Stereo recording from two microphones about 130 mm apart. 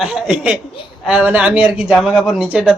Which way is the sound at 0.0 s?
5° right (ahead or behind).